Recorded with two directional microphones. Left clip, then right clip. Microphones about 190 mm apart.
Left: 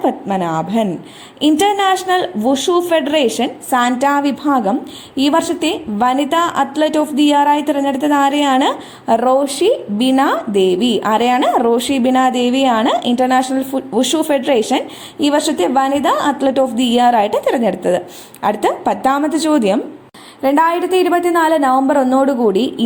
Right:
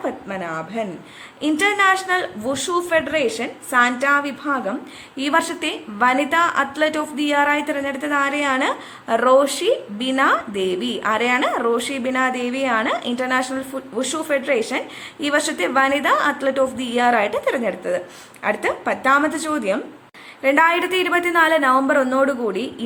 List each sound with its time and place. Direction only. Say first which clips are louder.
0.0 s a woman's voice: left 9 dB; 30° left (ahead or behind)